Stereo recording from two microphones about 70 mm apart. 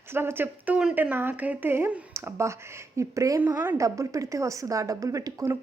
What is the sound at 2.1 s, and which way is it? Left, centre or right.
Speech, right.